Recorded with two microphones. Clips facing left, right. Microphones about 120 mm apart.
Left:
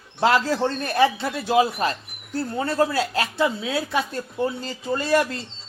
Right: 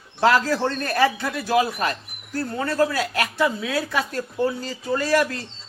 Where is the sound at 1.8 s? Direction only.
25° left (ahead or behind).